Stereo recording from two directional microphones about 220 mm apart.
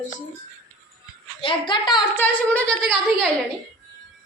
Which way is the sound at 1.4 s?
25° left (ahead or behind).